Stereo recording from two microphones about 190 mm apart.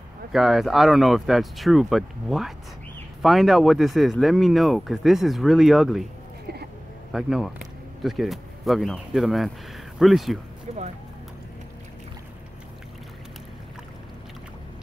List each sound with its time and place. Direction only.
0.3 s speech: centre (ahead or behind)
6.4 s a sound: 55° right (ahead or behind)
7.1 s speech: centre (ahead or behind)